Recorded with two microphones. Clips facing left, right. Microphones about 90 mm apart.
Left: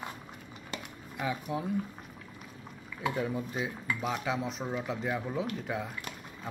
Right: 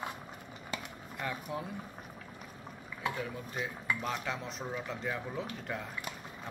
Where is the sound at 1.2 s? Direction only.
5° left (ahead or behind).